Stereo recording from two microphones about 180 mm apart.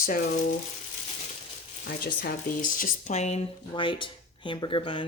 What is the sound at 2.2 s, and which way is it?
Speech, 50° left (ahead or behind).